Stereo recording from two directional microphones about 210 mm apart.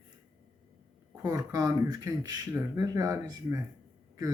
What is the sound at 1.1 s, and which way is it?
Speech, 15° right (ahead or behind).